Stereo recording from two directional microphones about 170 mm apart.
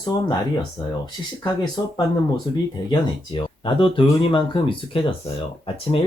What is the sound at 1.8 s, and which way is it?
Speech, 25° left (ahead or behind).